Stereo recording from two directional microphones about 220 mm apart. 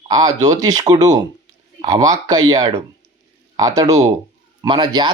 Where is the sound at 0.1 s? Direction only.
20° right (ahead or behind).